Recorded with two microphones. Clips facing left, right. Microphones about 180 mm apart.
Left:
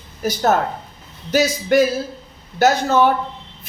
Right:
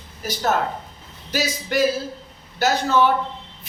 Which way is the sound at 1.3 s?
50° left (ahead or behind).